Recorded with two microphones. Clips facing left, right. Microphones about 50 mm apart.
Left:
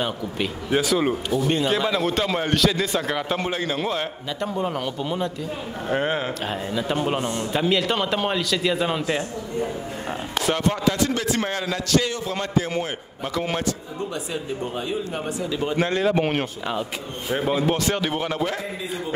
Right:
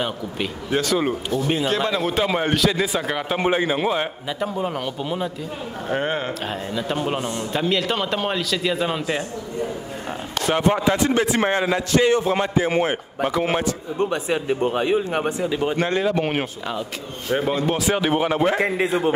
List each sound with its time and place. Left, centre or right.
0.0 s a man's voice: centre
3.3 s a man's voice: centre
4.4 s a man's voice: centre
10.5 s a man's voice: centre
13.3 s speech: centre
13.9 s speech: right
15.2 s a man's voice: right
15.7 s a man's voice: centre
17.4 s speech: centre
18.6 s a man's voice: right